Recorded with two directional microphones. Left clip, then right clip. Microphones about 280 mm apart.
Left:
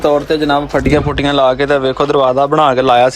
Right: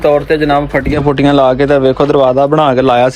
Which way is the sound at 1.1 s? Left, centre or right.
Centre.